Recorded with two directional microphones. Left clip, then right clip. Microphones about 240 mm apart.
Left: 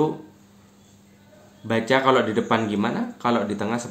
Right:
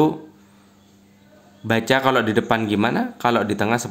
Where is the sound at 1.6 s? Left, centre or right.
Right.